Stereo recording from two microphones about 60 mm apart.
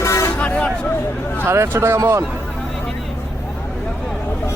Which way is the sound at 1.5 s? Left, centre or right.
Right.